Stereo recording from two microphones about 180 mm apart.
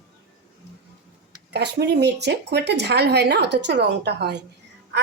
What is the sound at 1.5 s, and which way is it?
Speech, 70° right (ahead or behind).